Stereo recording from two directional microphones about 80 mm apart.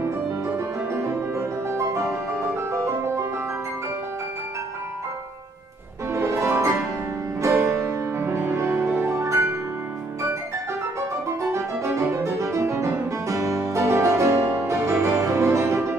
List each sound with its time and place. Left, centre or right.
0.6 s music: right
6.1 s music: right
11.5 s music: right